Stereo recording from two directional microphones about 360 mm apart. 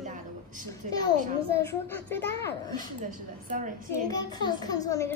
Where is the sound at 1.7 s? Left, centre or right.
Centre.